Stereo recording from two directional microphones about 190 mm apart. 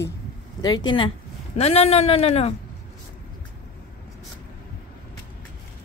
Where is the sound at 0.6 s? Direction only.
20° left (ahead or behind).